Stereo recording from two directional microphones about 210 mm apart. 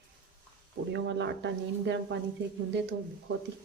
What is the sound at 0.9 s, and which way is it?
Speech, 55° right (ahead or behind).